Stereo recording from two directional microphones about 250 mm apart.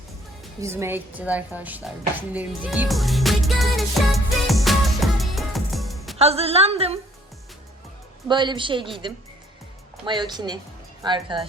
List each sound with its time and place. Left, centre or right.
0.6 s a sound: centre
6.1 s a woman's voice: right
8.3 s a woman's voice: centre
10.1 s a woman's voice: centre